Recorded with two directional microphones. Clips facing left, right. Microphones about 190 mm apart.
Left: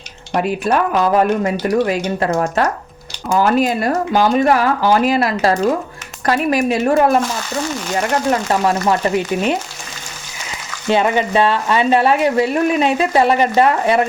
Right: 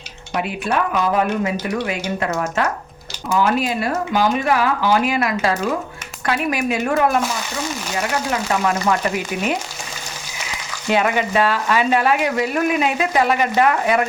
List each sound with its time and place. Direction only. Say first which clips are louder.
0.3 s speech: left 5 dB; 40° left (ahead or behind)
8.3 s speech: left 4 dB; 30° left (ahead or behind)
10.9 s speech: left 3 dB; 30° left (ahead or behind)